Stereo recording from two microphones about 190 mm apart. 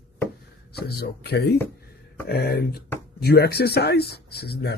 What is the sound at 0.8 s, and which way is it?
Speech, 60° left (ahead or behind).